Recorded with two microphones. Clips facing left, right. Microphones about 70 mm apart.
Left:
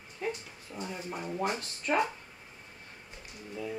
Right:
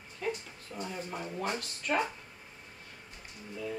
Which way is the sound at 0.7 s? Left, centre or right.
Centre.